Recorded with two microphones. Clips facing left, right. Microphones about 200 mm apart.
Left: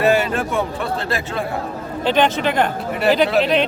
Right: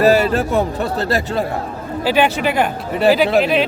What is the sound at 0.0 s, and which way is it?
Speech, 40° right (ahead or behind).